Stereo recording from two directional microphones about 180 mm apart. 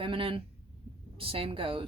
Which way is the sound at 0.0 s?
30° right (ahead or behind).